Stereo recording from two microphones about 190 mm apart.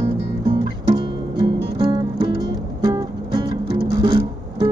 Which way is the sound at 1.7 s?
20° right (ahead or behind).